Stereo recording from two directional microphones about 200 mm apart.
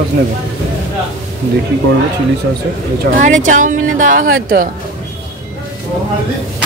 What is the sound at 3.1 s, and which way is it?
Speech, 40° right (ahead or behind).